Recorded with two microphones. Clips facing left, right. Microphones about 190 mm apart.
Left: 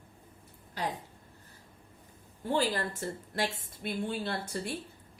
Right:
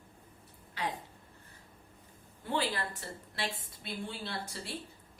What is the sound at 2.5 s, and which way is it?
A woman's voice, 45° left (ahead or behind).